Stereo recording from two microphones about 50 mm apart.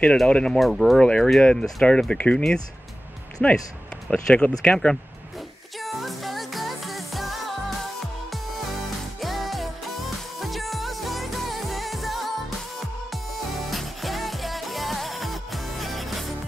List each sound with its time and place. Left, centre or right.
0.3 s speech: centre
0.6 s speech: centre
0.9 s speech: centre
5.8 s music: centre
9.2 s music: centre